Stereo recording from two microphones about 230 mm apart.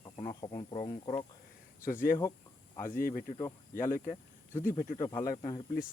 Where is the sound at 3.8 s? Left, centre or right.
Left.